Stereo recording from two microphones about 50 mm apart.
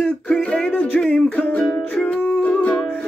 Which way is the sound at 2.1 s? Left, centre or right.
Left.